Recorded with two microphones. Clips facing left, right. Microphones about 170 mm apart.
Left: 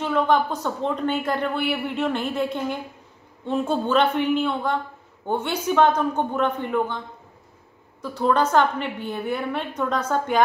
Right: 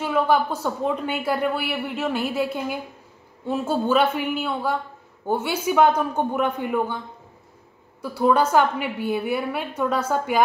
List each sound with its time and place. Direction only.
0.0 s speech: 5° right (ahead or behind)
8.0 s speech: 10° right (ahead or behind)